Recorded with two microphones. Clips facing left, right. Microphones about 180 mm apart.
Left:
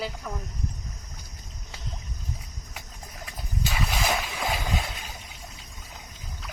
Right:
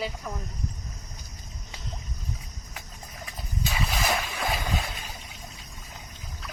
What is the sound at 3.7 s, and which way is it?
Boat, 5° left (ahead or behind).